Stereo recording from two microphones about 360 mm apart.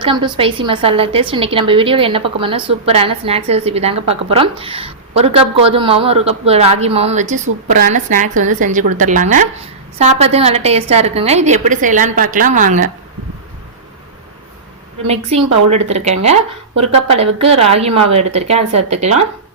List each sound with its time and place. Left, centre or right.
0.0 s a woman's voice: centre
15.0 s a woman's voice: centre